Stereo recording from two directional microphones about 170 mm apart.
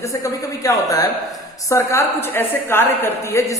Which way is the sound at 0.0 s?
20° left (ahead or behind).